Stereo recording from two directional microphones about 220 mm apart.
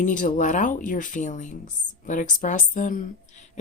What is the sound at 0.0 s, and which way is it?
Speech, 35° left (ahead or behind).